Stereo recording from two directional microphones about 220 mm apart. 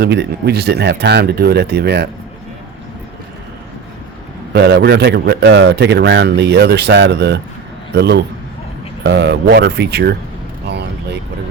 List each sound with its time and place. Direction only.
0.0 s a man's voice: 50° right (ahead or behind)
4.5 s a man's voice: 50° right (ahead or behind)